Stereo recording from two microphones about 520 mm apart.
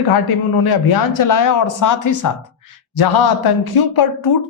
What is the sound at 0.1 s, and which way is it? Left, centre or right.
A man's voice, left.